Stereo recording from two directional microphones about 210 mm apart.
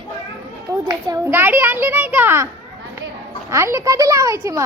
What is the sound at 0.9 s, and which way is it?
A child's voice, 15° right (ahead or behind).